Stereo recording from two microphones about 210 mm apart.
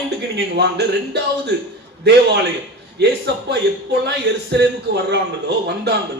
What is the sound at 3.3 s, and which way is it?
Speech, 55° right (ahead or behind).